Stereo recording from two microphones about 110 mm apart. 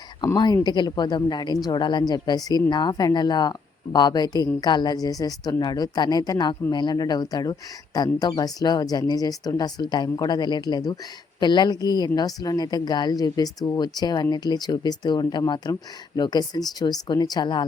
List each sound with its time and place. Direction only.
0.3 s a woman's voice: 40° left (ahead or behind)